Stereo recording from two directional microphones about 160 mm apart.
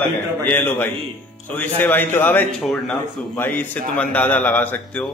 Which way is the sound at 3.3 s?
10° left (ahead or behind).